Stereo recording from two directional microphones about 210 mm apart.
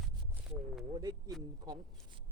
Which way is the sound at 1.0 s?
20° right (ahead or behind).